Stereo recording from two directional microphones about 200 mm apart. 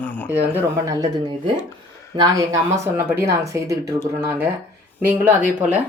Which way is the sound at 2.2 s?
20° right (ahead or behind).